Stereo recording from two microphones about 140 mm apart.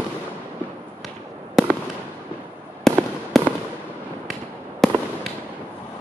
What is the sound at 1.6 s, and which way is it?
Fireworks, centre (ahead or behind).